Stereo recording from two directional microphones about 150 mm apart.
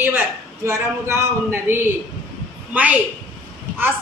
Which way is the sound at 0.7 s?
20° right (ahead or behind).